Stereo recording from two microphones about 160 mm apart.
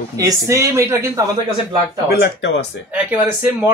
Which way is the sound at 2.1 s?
90° left.